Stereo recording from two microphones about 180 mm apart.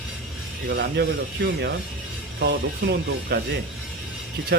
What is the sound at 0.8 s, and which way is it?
Speech, 65° right (ahead or behind).